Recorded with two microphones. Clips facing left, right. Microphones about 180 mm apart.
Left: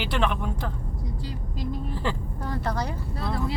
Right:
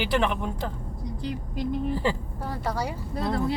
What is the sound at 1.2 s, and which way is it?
Speech, 20° right (ahead or behind).